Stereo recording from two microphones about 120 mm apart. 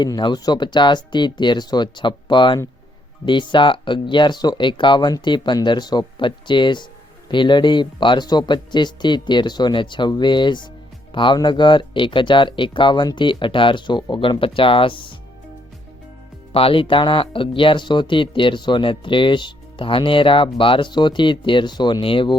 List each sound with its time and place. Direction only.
0.0 s speech: 40° left (ahead or behind)
16.5 s speech: 50° left (ahead or behind)